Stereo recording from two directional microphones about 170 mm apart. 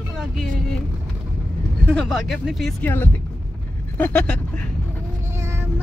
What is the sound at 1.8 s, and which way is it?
Speech, 5° left (ahead or behind).